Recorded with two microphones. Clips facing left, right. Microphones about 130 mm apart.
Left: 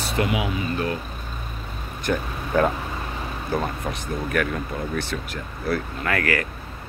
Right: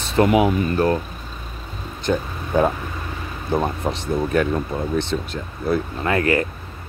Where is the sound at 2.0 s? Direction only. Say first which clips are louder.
Right 3 dB; 20° right (ahead or behind).